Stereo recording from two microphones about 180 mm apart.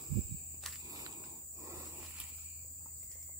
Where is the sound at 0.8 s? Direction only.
20° right (ahead or behind).